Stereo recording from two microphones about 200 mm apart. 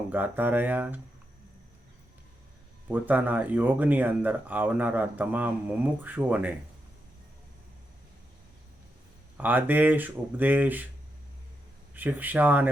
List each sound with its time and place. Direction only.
0.1 s speech: 10° right (ahead or behind)
2.9 s speech: 10° right (ahead or behind)
9.4 s speech: 10° right (ahead or behind)
11.9 s speech: 10° right (ahead or behind)